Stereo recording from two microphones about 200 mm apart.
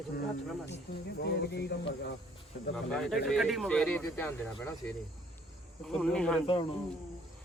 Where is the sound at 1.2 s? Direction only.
55° left (ahead or behind).